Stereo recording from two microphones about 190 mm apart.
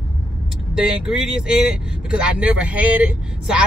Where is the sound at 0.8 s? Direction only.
Centre (ahead or behind).